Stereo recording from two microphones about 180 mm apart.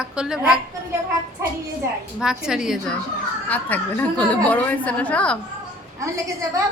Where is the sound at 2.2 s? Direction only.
5° right (ahead or behind).